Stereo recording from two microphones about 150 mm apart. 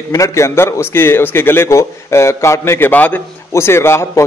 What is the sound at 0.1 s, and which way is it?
A man's voice, 20° left (ahead or behind).